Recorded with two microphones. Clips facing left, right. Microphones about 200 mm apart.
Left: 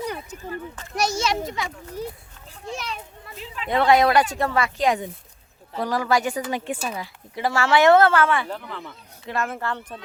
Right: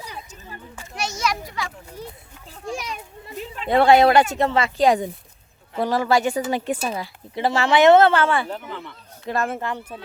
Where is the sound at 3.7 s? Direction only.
30° right (ahead or behind).